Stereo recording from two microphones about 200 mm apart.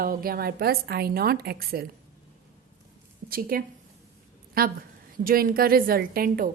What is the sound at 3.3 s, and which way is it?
A woman's voice, 45° right (ahead or behind).